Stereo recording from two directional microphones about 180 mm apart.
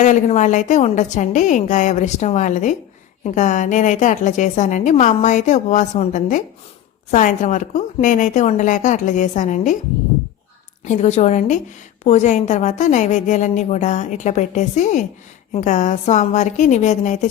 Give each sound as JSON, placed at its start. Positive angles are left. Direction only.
{"t": 0.0, "sound": "a woman's voice", "side_deg": 40}
{"t": 10.8, "sound": "a woman's voice", "side_deg": 40}